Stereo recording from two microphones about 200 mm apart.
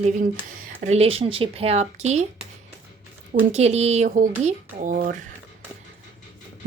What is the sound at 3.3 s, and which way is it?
Speech, 40° right (ahead or behind).